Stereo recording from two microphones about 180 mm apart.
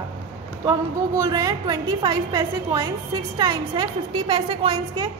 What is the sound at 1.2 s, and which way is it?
A woman's voice, 20° right (ahead or behind).